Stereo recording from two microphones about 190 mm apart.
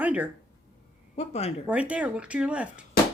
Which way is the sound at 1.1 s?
35° left (ahead or behind).